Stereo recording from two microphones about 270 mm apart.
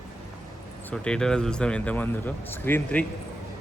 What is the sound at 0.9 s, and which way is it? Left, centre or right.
Speech, centre.